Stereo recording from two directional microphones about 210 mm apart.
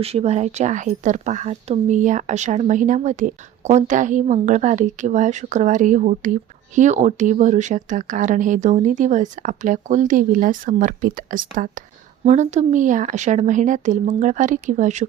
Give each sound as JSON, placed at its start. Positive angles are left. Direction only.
{"t": 0.0, "sound": "speech", "side_deg": -30}